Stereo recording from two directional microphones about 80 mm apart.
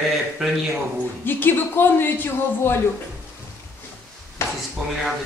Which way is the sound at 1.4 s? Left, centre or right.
Left.